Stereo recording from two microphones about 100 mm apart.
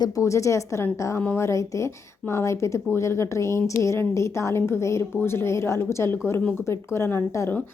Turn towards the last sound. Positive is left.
turn(degrees=25)  # may be behind; listen again after turning